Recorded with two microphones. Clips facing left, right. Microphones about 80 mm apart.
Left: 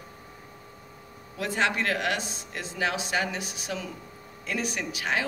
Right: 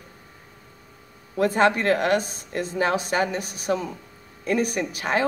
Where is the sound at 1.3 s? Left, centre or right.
Right.